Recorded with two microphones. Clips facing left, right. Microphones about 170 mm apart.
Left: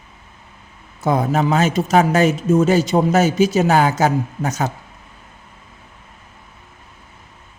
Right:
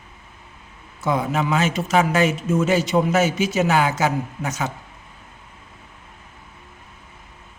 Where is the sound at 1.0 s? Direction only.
40° left (ahead or behind).